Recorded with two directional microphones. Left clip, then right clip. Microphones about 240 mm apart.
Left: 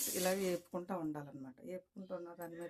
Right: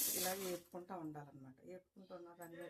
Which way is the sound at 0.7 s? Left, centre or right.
Left.